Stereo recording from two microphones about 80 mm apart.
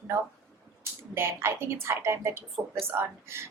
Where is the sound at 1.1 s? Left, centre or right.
Right.